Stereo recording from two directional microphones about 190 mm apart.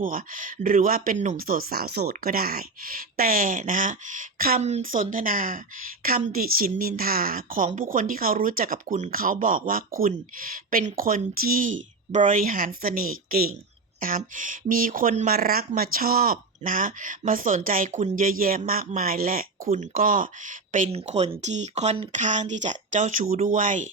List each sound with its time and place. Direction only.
0.0 s a woman's voice: 45° right (ahead or behind)